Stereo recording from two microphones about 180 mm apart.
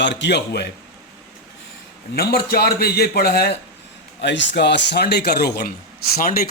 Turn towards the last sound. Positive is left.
turn(degrees=55)  # may be behind; listen again after turning